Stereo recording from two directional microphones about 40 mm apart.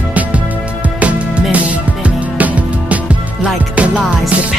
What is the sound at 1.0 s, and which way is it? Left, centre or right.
Music, right.